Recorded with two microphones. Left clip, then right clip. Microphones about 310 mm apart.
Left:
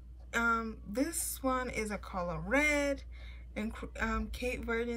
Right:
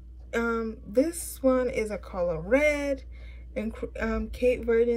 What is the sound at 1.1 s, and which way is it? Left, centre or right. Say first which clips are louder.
A woman's voice: right 9 dB; centre.